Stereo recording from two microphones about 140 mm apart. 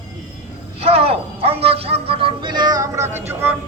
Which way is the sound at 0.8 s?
45° right (ahead or behind).